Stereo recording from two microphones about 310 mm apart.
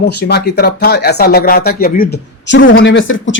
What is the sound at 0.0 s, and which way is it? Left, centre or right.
Speech, left.